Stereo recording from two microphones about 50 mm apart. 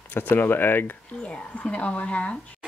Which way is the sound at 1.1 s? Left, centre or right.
Left.